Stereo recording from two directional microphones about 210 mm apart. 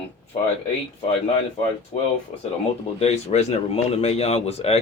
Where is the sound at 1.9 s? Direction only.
25° left (ahead or behind).